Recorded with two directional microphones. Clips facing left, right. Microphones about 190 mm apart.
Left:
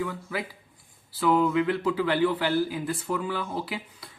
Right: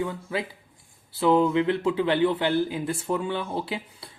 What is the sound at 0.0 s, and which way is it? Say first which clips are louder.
Speech: right 2 dB; 25° right (ahead or behind).